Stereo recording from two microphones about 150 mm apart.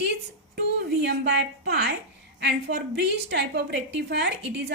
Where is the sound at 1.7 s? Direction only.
90° right.